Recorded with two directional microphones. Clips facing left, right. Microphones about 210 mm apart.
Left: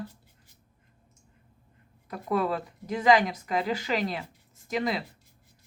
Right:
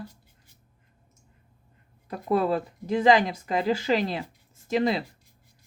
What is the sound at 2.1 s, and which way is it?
Speech, 30° right (ahead or behind).